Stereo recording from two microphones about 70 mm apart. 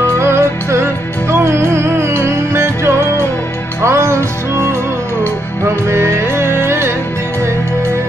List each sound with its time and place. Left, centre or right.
0.2 s music: right
5.9 s music: right